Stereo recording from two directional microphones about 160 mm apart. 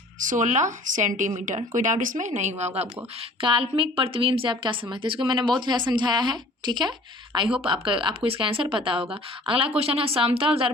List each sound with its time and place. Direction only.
0.2 s speech: 55° right (ahead or behind)
3.4 s a woman's voice: 30° right (ahead or behind)